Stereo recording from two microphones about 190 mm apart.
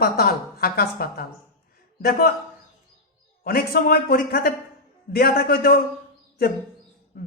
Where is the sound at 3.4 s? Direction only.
50° left (ahead or behind).